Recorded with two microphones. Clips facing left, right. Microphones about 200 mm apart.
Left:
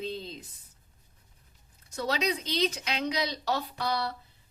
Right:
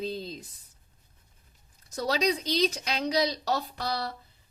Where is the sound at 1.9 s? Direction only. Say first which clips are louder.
Right 3 dB; 35° right (ahead or behind).